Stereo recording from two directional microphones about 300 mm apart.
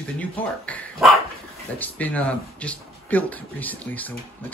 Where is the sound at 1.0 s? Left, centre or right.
Centre.